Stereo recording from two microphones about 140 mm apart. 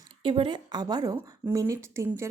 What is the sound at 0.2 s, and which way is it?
A woman's voice, 35° right (ahead or behind).